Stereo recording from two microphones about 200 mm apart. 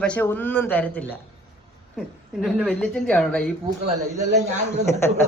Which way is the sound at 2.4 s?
Centre (ahead or behind).